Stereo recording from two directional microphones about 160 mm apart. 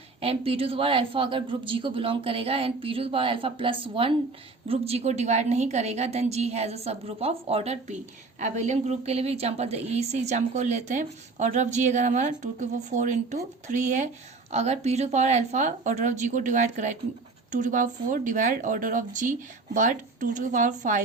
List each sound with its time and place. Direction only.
0.2 s a woman's voice: 35° right (ahead or behind)